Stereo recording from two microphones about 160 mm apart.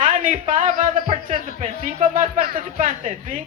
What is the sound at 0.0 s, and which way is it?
A man's voice, 55° right (ahead or behind).